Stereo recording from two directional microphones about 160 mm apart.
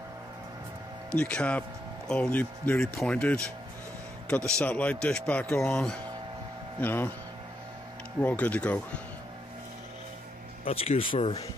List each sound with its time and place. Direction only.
1.1 s speech: 5° left (ahead or behind)
4.6 s speech: 10° left (ahead or behind)
8.2 s speech: 10° left (ahead or behind)
10.6 s speech: 35° left (ahead or behind)